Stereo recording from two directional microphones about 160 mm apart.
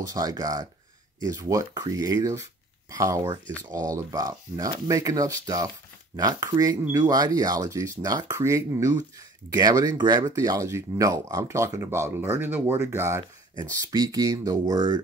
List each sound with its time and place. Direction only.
0.0 s speech: 25° right (ahead or behind)